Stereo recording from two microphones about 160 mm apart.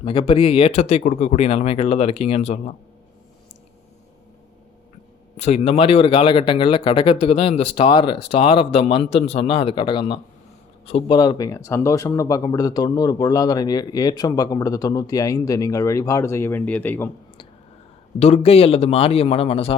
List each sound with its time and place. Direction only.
0.0 s speech: 35° left (ahead or behind)
5.4 s speech: 40° left (ahead or behind)
11.2 s speech: 25° left (ahead or behind)
18.2 s speech: 40° left (ahead or behind)